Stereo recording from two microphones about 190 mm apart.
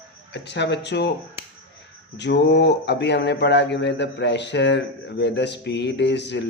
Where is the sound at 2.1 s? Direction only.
65° left (ahead or behind).